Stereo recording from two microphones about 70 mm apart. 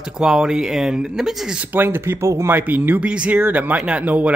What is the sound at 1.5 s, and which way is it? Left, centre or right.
Speech, right.